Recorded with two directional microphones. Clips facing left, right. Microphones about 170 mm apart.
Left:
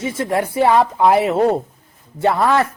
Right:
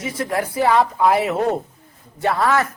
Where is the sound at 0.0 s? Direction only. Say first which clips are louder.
Left 3 dB; 25° left (ahead or behind).